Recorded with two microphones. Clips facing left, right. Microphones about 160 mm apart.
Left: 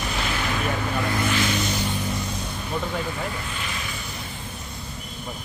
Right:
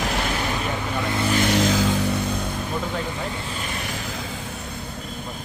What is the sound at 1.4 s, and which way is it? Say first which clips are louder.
Vehicle: right 5 dB; 80° right.